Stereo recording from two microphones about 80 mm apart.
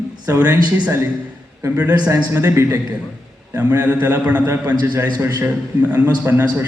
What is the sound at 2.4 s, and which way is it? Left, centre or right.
Speech, right.